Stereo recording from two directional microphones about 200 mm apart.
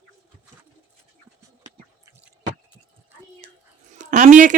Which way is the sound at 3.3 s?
35° right (ahead or behind).